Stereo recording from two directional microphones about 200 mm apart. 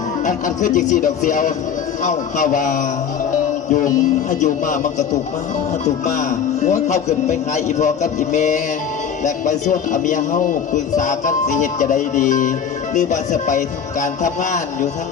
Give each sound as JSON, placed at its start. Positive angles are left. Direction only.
{"t": 0.3, "sound": "a man's voice", "side_deg": 40}